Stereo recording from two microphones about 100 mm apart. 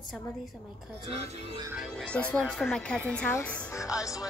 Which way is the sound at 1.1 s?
90° right.